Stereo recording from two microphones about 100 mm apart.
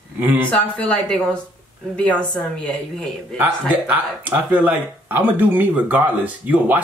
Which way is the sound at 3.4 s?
20° right (ahead or behind).